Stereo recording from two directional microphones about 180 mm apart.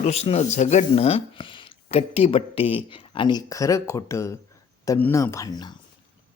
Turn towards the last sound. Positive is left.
turn(degrees=20)  # may be behind; listen again after turning